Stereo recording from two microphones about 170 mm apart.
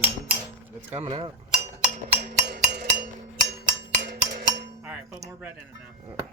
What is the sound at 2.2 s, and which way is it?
Music, 70° right (ahead or behind).